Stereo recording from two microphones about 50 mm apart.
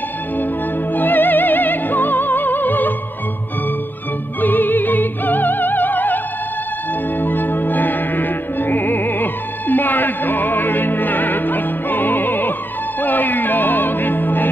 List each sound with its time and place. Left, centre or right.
0.9 s music: left
4.4 s opera: left
7.2 s music: left